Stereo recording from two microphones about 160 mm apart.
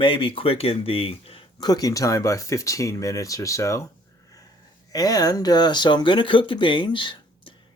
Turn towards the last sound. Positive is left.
turn(degrees=30)  # may be behind; listen again after turning